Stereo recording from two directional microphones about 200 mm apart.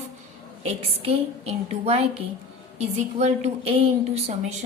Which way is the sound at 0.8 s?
30° right (ahead or behind).